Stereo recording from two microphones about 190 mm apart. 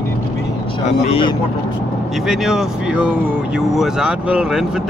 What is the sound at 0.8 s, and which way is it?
Speech, 30° left (ahead or behind).